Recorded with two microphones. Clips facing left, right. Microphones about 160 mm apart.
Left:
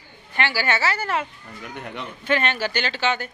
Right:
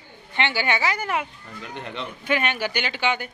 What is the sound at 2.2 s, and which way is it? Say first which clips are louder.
A woman's voice: left 2 dB; 10° right (ahead or behind).